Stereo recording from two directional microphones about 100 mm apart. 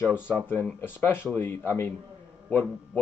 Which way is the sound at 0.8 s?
20° left (ahead or behind).